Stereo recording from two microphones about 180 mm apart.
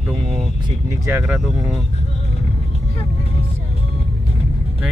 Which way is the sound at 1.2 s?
Centre (ahead or behind).